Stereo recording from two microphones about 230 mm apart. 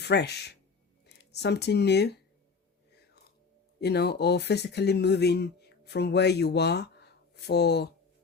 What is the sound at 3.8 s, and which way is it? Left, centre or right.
Speech, left.